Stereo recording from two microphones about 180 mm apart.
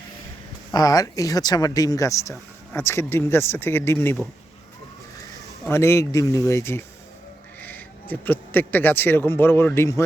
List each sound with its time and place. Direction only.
0.7 s speech: 20° left (ahead or behind)
5.6 s speech: 15° left (ahead or behind)